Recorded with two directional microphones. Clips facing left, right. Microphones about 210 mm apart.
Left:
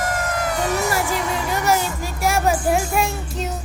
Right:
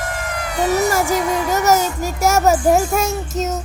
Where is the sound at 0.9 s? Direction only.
45° right (ahead or behind).